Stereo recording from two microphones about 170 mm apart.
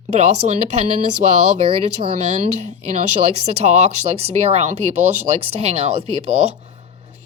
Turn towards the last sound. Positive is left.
turn(degrees=-35)  # may be behind; listen again after turning